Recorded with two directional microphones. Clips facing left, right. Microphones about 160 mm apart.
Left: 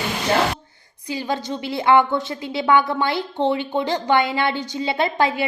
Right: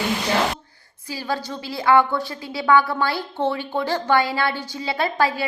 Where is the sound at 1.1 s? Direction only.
20° left (ahead or behind).